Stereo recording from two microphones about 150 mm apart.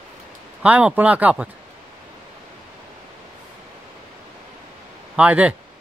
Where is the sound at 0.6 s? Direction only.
10° right (ahead or behind).